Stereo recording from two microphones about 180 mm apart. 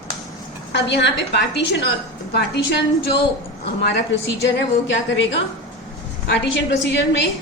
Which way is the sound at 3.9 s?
75° left (ahead or behind).